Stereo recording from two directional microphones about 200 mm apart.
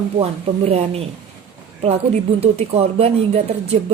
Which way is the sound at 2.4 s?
30° right (ahead or behind).